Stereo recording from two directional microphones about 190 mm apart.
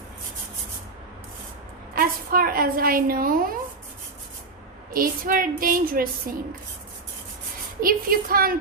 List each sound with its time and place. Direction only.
2.0 s a woman's voice: 50° right (ahead or behind)
4.9 s child singing: 50° right (ahead or behind)
7.8 s child singing: 50° right (ahead or behind)